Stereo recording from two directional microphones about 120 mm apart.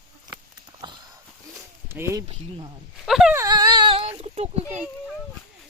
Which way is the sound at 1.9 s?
20° right (ahead or behind).